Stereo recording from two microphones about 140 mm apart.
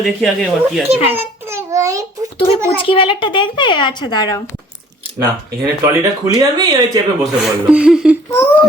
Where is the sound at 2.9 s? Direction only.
40° left (ahead or behind).